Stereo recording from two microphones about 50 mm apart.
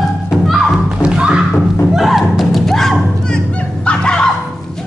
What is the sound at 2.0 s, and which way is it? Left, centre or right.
Music, centre.